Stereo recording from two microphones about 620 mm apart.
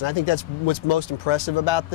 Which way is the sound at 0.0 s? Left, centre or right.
Left.